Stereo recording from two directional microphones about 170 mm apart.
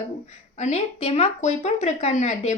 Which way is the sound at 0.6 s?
35° left (ahead or behind).